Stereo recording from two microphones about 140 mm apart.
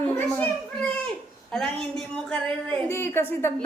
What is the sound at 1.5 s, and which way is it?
Speech, 5° left (ahead or behind).